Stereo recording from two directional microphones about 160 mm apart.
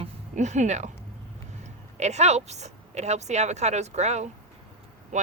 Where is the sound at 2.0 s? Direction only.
45° right (ahead or behind).